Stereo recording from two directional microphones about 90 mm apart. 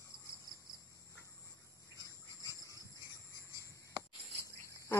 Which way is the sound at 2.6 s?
40° left (ahead or behind).